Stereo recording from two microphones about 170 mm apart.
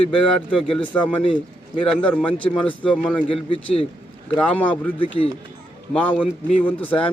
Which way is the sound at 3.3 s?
35° left (ahead or behind).